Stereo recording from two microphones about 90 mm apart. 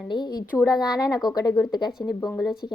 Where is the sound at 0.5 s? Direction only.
45° left (ahead or behind).